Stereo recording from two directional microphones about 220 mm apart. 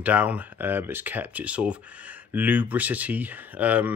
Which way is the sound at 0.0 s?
5° right (ahead or behind).